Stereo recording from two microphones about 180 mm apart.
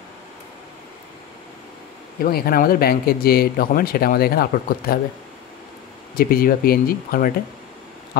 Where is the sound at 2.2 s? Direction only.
55° left (ahead or behind).